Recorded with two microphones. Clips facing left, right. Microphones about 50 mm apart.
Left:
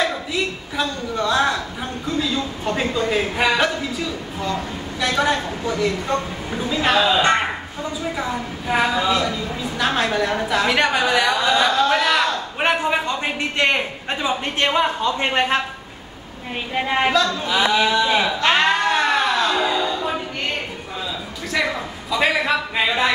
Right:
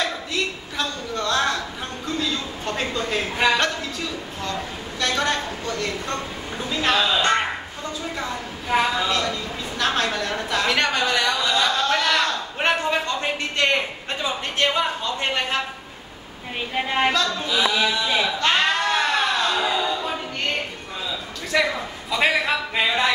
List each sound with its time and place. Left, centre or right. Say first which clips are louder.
0.0 s a sound: left 3 dB; centre
2.0 s a man's voice: left 3 dB; centre
7.1 s speech: left 3 dB; centre
8.2 s a man's voice: left 4 dB; centre; by 15.6 s left
16.7 s a woman's voice: left 3 dB; centre
17.6 s speech: left 4 dB; left
18.1 s a sound: left 3 dB; centre
21.5 s a man's voice: right 1 dB; centre